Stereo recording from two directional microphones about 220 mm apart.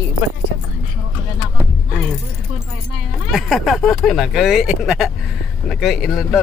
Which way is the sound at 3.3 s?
Centre (ahead or behind).